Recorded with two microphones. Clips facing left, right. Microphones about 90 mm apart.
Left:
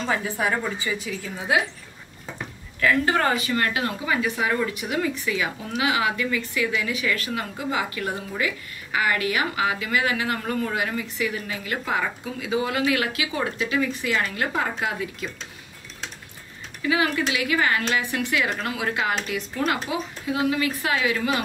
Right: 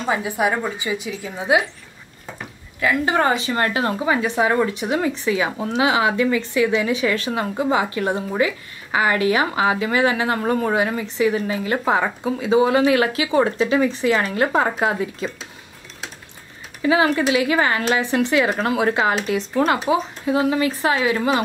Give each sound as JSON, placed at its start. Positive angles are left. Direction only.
{"t": 0.0, "sound": "a woman's voice", "side_deg": -15}
{"t": 2.8, "sound": "a woman's voice", "side_deg": -20}
{"t": 16.8, "sound": "a woman's voice", "side_deg": -30}